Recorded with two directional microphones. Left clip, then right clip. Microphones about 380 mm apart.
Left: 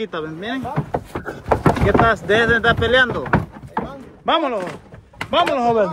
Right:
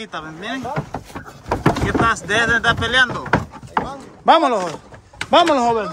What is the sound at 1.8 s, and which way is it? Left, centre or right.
Speech, centre.